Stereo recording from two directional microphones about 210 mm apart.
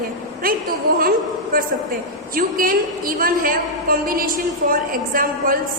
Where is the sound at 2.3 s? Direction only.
45° right (ahead or behind).